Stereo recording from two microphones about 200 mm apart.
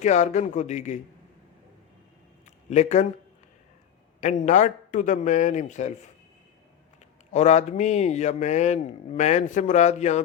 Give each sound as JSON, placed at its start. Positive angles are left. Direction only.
{"t": 0.0, "sound": "speech", "side_deg": 35}
{"t": 2.6, "sound": "speech", "side_deg": 35}
{"t": 4.2, "sound": "speech", "side_deg": 35}
{"t": 7.3, "sound": "speech", "side_deg": 35}